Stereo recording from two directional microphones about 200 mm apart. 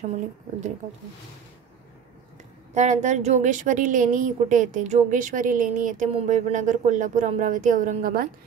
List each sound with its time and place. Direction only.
2.7 s a woman's voice: 35° right (ahead or behind)